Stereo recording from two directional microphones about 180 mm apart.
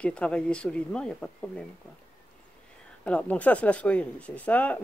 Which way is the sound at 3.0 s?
5° left (ahead or behind).